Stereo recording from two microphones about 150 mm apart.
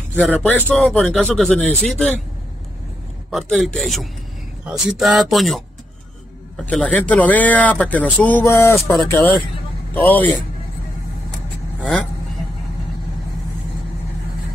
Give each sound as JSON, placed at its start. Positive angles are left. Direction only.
{"t": 0.2, "sound": "speech", "side_deg": 10}
{"t": 3.3, "sound": "a man's voice", "side_deg": 0}